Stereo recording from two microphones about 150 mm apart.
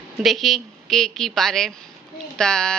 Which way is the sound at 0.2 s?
Centre (ahead or behind).